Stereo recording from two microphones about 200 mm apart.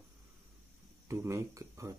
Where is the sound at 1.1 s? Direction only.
15° right (ahead or behind).